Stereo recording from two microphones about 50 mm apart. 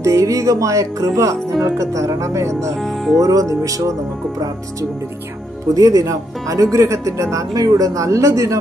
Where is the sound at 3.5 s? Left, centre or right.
Right.